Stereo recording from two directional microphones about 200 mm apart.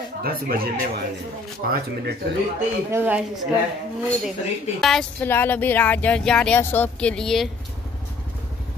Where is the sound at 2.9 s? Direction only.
10° right (ahead or behind).